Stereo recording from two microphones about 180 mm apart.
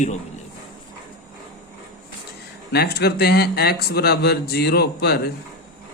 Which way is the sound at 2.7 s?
65° left (ahead or behind).